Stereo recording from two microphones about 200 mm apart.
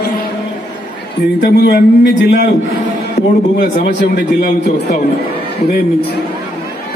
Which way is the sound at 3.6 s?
35° left (ahead or behind).